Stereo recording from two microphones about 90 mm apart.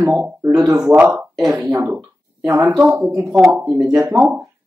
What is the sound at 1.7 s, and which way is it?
Speech, 30° right (ahead or behind).